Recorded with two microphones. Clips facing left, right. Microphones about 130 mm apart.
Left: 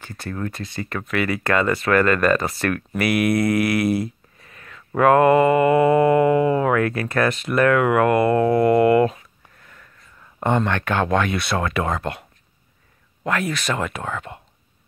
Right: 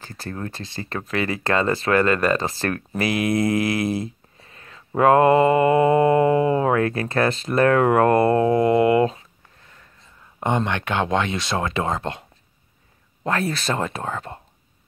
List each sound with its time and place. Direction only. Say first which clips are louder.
0.0 s speech: left 2 dB; 30° right (ahead or behind)
13.2 s speech: even; 30° right (ahead or behind)